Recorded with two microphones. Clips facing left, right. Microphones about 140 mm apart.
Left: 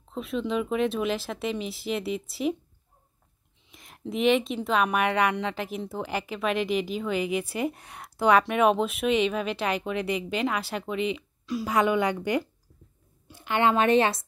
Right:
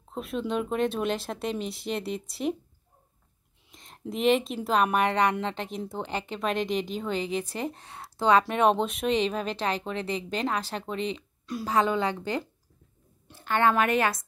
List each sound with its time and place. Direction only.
0.1 s speech: centre (ahead or behind)
4.0 s speech: centre (ahead or behind)
4.9 s speech: 35° right (ahead or behind)
6.5 s a woman's voice: 5° left (ahead or behind)
8.4 s speech: 30° right (ahead or behind)
8.6 s speech: 5° left (ahead or behind)
8.9 s speech: 35° right (ahead or behind)
11.7 s a woman's voice: 15° left (ahead or behind)